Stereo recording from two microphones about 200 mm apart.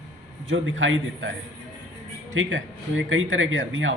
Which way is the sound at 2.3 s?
75° right (ahead or behind).